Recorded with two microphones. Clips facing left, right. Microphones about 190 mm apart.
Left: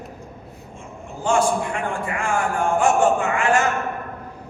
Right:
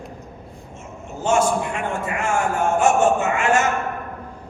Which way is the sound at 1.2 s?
25° right (ahead or behind).